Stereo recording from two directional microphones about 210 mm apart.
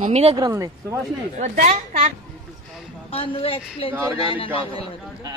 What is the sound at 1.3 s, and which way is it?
Speech, 35° right (ahead or behind).